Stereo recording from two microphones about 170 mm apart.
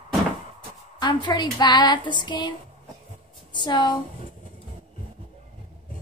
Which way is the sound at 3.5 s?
25° left (ahead or behind).